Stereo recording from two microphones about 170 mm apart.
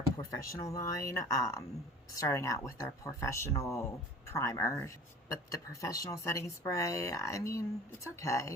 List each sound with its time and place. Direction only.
0.2 s speech: 20° left (ahead or behind)